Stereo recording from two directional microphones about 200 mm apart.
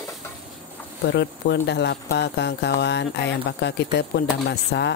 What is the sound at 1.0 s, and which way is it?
Speech, 60° left (ahead or behind).